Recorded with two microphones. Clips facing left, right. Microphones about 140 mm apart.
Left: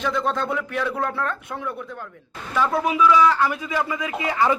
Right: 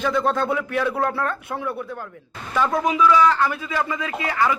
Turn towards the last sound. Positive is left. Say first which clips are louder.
# left 1 dB
turn(degrees=20)  # may be behind; listen again after turning